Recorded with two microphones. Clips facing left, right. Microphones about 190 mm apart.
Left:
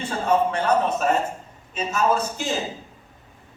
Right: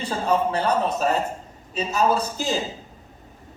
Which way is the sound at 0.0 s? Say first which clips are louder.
Left 1 dB; 35° right (ahead or behind).